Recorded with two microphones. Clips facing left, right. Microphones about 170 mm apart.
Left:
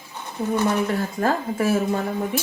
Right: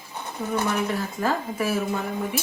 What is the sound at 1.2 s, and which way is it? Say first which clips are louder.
Speech: left 3 dB; 50° left (ahead or behind).